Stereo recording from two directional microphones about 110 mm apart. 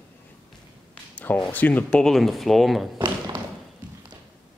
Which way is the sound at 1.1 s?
15° left (ahead or behind).